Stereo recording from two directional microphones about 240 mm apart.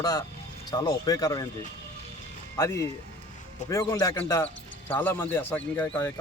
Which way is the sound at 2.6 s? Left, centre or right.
Centre.